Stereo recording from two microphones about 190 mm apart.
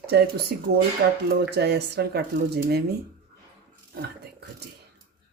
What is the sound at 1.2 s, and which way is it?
Speech, 60° right (ahead or behind).